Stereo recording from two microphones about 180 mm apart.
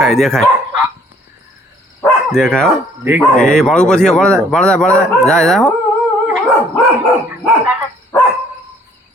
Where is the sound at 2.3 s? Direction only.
5° left (ahead or behind).